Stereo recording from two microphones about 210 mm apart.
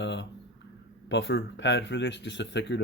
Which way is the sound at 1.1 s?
55° left (ahead or behind).